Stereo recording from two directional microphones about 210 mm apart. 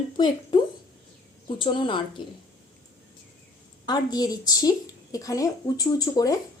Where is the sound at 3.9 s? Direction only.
20° left (ahead or behind).